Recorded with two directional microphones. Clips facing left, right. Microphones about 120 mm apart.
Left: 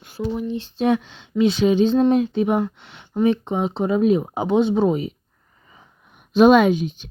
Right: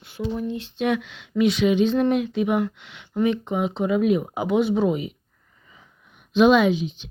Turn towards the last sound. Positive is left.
turn(degrees=45)  # may be behind; listen again after turning